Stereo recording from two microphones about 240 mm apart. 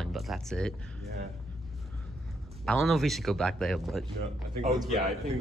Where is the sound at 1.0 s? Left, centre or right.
Right.